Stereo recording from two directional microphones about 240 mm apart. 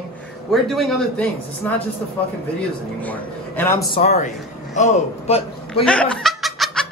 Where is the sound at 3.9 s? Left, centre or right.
Left.